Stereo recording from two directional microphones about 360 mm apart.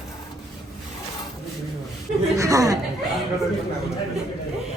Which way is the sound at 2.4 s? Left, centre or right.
Centre.